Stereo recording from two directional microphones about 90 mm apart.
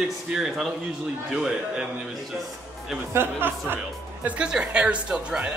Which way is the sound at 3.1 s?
25° right (ahead or behind).